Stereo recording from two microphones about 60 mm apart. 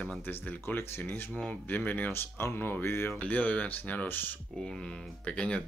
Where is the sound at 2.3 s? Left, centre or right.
Left.